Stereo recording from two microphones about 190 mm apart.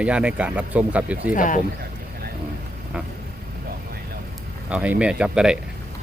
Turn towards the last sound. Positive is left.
turn(degrees=-5)  # may be behind; listen again after turning